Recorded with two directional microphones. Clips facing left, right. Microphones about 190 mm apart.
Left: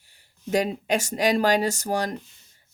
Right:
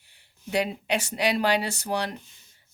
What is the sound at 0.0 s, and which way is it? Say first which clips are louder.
Speech: left 5 dB; 40° left (ahead or behind).